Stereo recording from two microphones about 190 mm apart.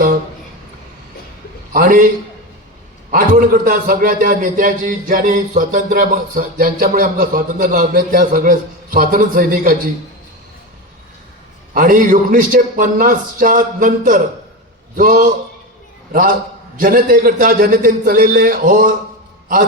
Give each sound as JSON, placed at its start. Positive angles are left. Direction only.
{"t": 1.7, "sound": "a man's voice", "side_deg": -45}
{"t": 3.1, "sound": "a man's voice", "side_deg": -45}
{"t": 11.7, "sound": "a man's voice", "side_deg": -45}
{"t": 16.7, "sound": "a man's voice", "side_deg": -45}